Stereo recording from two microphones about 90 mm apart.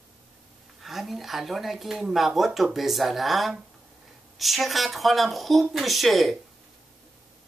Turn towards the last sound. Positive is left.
turn(degrees=0)  # may be behind; listen again after turning